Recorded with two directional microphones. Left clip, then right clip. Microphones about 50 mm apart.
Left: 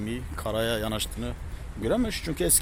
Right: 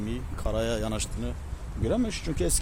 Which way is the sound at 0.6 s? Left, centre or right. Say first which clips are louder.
Left 2 dB; right.